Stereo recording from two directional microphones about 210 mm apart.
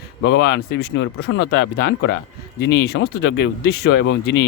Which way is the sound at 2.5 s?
50° left (ahead or behind).